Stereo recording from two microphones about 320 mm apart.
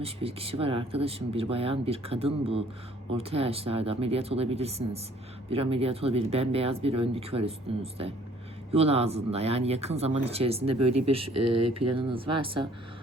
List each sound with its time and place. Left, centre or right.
0.0 s speech: centre
11.2 s speech: right
11.9 s speech: centre